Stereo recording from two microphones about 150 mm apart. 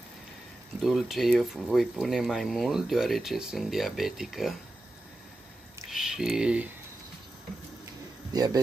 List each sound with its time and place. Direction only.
0.7 s speech: centre (ahead or behind)
5.9 s a sound: 5° right (ahead or behind)
8.3 s a man's voice: 25° right (ahead or behind)